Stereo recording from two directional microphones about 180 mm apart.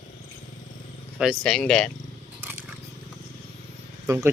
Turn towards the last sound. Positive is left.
turn(degrees=-15)  # may be behind; listen again after turning